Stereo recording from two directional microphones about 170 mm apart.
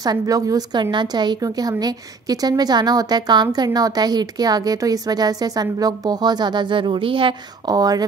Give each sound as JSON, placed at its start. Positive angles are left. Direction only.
{"t": 0.0, "sound": "a woman's voice", "side_deg": -20}